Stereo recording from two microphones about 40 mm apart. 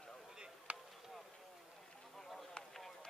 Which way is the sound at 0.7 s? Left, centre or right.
Right.